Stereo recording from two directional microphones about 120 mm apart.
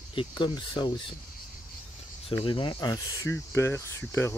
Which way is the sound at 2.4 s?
40° left (ahead or behind).